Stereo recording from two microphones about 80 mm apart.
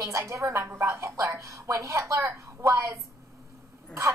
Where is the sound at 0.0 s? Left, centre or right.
Right.